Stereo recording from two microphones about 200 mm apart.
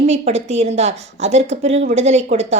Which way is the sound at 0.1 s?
35° right (ahead or behind).